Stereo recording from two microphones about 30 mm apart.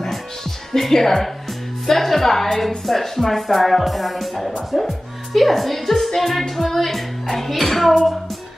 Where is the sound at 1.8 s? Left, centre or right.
Centre.